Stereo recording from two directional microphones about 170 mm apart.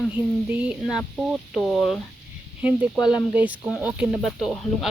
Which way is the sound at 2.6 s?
10° right (ahead or behind).